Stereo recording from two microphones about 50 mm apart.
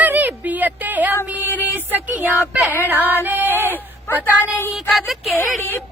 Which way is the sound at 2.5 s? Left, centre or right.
Right.